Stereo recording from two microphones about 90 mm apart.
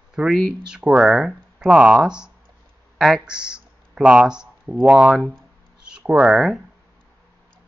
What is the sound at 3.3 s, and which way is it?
Speech, 55° right (ahead or behind).